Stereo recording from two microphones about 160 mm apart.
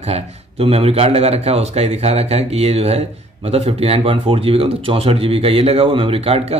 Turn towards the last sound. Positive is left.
turn(degrees=-40)  # may be behind; listen again after turning